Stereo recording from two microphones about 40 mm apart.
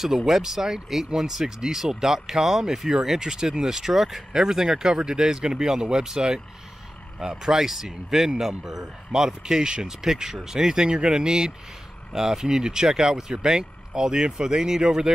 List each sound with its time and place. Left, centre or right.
0.0 s speech: centre